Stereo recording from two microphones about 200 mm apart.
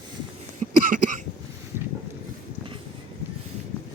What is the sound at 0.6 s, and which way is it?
Cough, 40° right (ahead or behind).